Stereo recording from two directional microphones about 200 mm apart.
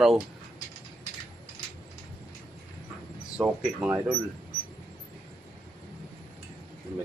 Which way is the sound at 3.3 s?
5° right (ahead or behind).